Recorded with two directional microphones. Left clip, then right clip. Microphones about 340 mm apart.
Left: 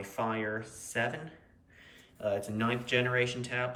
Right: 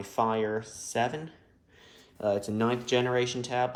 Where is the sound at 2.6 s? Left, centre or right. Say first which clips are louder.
Right 1 dB; centre.